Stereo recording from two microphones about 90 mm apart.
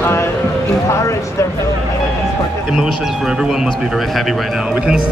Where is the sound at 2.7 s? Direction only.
5° right (ahead or behind).